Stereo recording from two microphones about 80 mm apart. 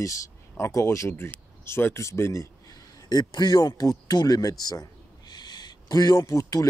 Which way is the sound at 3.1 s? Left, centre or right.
Left.